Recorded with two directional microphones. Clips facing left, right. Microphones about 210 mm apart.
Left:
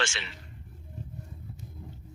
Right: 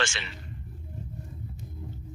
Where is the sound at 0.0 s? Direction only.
50° right (ahead or behind).